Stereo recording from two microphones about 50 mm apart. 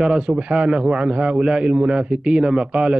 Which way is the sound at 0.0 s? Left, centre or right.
Centre.